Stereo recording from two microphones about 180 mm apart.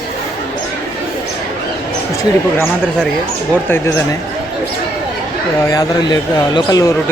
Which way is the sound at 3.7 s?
15° left (ahead or behind).